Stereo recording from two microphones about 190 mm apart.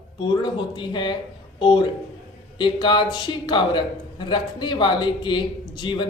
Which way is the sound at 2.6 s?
25° left (ahead or behind).